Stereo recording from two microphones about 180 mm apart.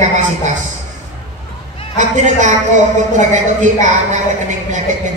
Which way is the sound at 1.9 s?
40° right (ahead or behind).